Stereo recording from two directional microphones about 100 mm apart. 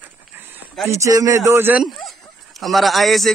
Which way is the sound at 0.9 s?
35° right (ahead or behind).